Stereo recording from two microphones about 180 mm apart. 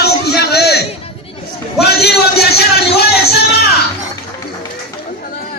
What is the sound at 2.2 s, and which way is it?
Speech, 60° left (ahead or behind).